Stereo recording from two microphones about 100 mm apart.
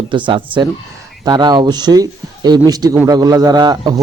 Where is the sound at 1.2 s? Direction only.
45° right (ahead or behind).